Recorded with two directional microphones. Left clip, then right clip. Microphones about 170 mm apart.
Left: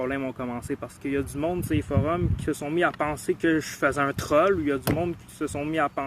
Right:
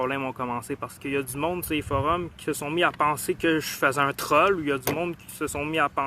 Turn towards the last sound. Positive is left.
turn(degrees=20)  # may be behind; listen again after turning